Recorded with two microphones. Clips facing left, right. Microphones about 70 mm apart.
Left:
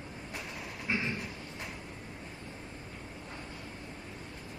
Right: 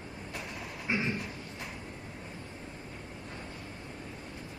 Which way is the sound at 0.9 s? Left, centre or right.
Centre.